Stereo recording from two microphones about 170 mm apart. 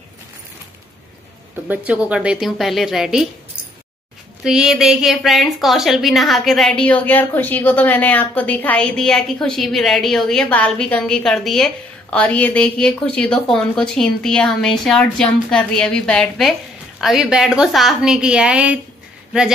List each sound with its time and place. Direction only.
1.7 s a woman's voice: 10° right (ahead or behind)
4.4 s a woman's voice: 5° right (ahead or behind)